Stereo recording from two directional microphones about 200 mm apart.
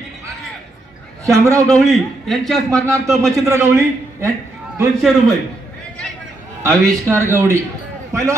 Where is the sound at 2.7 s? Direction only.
15° right (ahead or behind).